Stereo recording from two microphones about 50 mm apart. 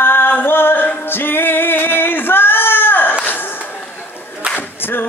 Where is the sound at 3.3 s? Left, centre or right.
Left.